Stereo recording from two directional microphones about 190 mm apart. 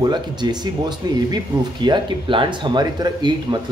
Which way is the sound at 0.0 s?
20° right (ahead or behind).